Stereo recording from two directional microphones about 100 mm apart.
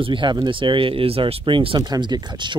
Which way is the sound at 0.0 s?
55° right (ahead or behind).